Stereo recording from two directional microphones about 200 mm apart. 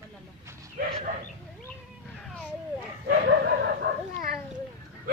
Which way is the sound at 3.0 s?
55° right (ahead or behind).